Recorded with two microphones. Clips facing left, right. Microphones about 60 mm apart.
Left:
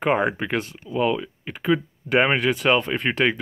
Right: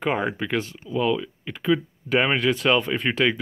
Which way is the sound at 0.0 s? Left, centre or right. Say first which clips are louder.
Left 3 dB; left.